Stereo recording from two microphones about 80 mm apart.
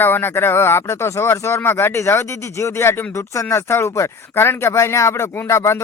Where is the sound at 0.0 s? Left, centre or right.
Left.